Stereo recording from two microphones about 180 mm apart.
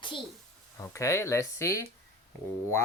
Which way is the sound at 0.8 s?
15° left (ahead or behind).